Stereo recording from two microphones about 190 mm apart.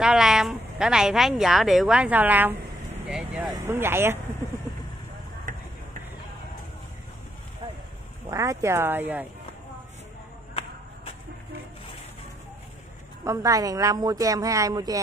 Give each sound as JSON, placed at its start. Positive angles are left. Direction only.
{"t": 0.0, "sound": "a woman's voice", "side_deg": -5}
{"t": 8.3, "sound": "a woman's voice", "side_deg": -15}
{"t": 13.2, "sound": "a woman's voice", "side_deg": -15}